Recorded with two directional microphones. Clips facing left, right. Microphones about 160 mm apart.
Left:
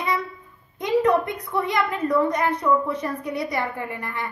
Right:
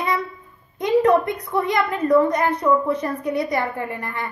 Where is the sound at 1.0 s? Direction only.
40° right (ahead or behind).